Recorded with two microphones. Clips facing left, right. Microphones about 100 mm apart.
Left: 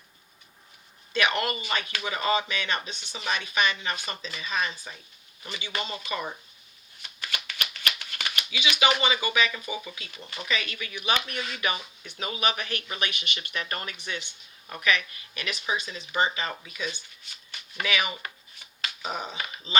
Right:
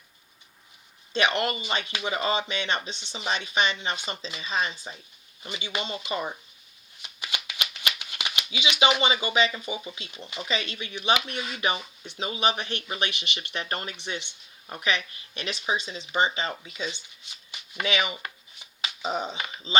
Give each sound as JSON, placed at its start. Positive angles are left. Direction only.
{"t": 1.1, "sound": "speech", "side_deg": -25}
{"t": 7.0, "sound": "shuffling cards", "side_deg": -20}
{"t": 8.4, "sound": "speech", "side_deg": -25}
{"t": 17.5, "sound": "shuffling cards", "side_deg": -25}
{"t": 18.8, "sound": "speech", "side_deg": -25}